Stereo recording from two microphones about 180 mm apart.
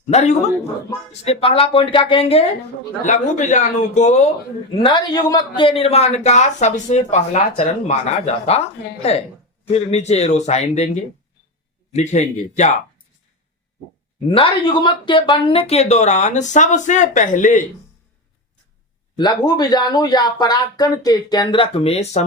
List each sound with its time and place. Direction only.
0.1 s speech: 40° left (ahead or behind)
4.7 s speech: 30° left (ahead or behind)
14.3 s speech: 30° left (ahead or behind); by 17.6 s 45° left (ahead or behind)
19.1 s speech: 20° left (ahead or behind)